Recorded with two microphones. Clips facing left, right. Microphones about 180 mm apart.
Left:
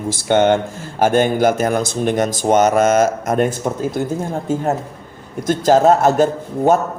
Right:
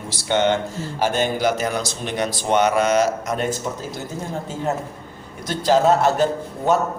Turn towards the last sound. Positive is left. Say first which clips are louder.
# left 5 dB
turn(degrees=45)  # may be behind; listen again after turning